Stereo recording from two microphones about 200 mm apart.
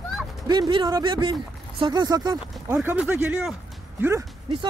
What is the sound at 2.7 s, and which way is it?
Speech, 5° right (ahead or behind).